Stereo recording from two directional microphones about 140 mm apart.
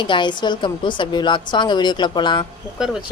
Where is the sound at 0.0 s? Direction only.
35° left (ahead or behind).